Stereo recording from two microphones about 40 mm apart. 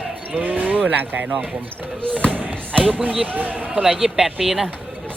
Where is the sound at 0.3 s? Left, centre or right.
Right.